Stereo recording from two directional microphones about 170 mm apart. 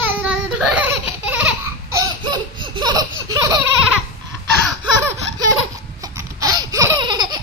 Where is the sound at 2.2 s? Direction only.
25° right (ahead or behind).